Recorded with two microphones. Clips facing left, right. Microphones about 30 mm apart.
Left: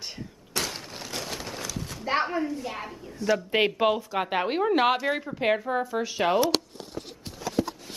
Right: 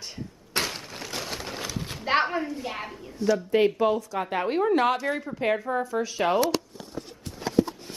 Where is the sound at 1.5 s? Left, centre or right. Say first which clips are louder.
Right 2 dB; right.